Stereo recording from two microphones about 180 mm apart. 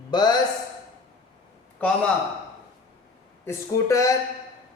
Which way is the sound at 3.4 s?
15° left (ahead or behind).